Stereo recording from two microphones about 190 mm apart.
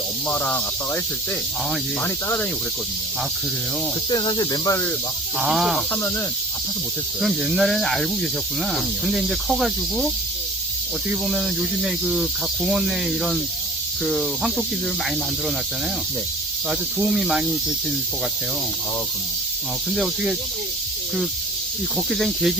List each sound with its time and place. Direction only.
0.3 s speech: 10° left (ahead or behind)
2.0 s speech: 10° left (ahead or behind)
4.1 s speech: 25° left (ahead or behind)
5.4 s speech: centre (ahead or behind)
7.2 s speech: centre (ahead or behind)
11.1 s speech: centre (ahead or behind)
16.6 s speech: 5° right (ahead or behind)
19.9 s speech: centre (ahead or behind)
21.9 s speech: centre (ahead or behind)